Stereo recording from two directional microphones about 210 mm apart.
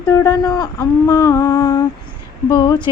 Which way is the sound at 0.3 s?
15° left (ahead or behind).